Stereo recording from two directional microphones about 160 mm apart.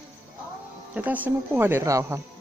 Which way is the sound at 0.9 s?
10° right (ahead or behind).